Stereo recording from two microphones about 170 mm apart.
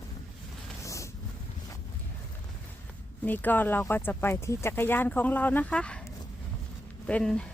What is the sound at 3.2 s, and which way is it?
Speech, 10° left (ahead or behind).